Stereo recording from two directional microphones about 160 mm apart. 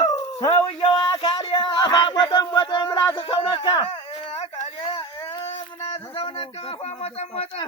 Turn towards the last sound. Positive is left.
turn(degrees=40)  # may be behind; listen again after turning